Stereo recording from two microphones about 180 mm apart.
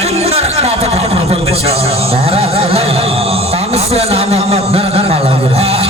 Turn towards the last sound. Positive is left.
turn(degrees=-35)  # may be behind; listen again after turning